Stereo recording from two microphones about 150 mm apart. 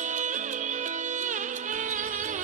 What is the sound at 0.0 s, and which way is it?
Music, 55° right (ahead or behind).